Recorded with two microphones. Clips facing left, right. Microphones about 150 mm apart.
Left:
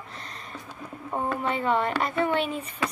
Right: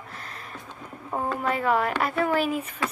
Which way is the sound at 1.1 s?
Centre (ahead or behind).